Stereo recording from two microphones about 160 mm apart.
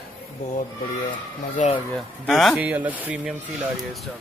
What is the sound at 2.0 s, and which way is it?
Speech, centre (ahead or behind).